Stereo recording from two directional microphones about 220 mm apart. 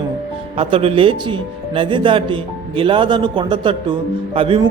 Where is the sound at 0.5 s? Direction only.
25° right (ahead or behind).